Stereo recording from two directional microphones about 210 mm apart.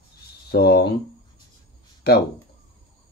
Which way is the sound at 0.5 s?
50° left (ahead or behind).